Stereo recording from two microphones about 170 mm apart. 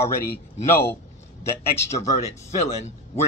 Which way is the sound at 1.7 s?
40° left (ahead or behind).